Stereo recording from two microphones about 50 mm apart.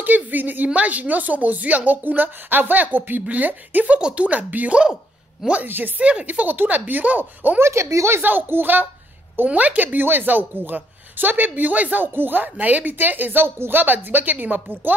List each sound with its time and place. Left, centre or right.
0.0 s speech: right
5.7 s speech: right
6.0 s speech: right
7.6 s speech: right
8.2 s speech: right
9.4 s speech: right